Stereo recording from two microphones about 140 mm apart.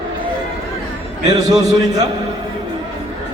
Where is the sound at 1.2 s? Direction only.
25° right (ahead or behind).